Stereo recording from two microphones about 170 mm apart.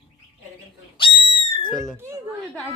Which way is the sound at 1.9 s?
15° right (ahead or behind).